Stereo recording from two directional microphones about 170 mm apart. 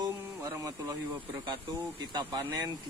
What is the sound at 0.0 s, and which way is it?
Speech, 20° right (ahead or behind).